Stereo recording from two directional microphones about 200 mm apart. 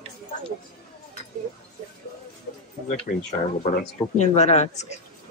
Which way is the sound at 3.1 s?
45° left (ahead or behind).